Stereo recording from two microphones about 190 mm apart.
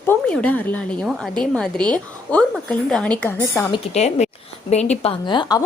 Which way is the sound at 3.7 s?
35° left (ahead or behind).